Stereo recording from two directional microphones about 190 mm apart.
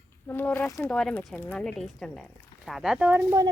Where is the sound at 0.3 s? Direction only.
10° left (ahead or behind).